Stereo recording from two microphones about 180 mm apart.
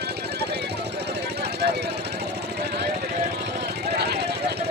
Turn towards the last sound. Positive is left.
turn(degrees=-65)  # may be behind; listen again after turning